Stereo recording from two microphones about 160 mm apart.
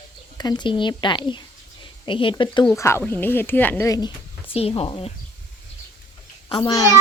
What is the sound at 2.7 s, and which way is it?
Speech, 15° left (ahead or behind).